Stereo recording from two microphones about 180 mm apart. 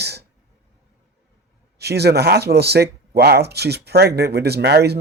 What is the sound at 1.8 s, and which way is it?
Speech, 65° right (ahead or behind).